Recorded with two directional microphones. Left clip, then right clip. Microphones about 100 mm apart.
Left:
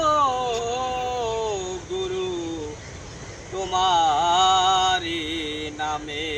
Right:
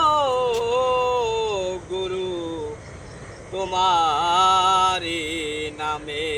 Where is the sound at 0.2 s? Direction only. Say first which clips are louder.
Right 1 dB; 35° right (ahead or behind).